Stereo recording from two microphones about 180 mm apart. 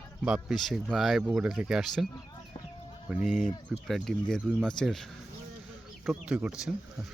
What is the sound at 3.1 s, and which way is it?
Speech, centre (ahead or behind).